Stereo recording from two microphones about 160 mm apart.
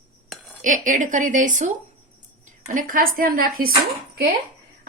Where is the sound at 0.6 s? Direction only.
55° right (ahead or behind).